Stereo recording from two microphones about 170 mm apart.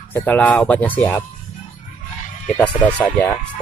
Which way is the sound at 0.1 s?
10° left (ahead or behind).